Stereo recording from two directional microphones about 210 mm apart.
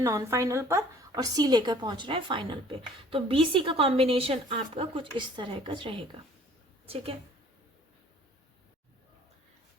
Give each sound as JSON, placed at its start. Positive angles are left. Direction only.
{"t": 0.0, "sound": "a woman's voice", "side_deg": -15}